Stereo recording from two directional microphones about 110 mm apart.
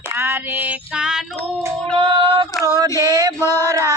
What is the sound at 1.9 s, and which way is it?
Female singing, 50° right (ahead or behind).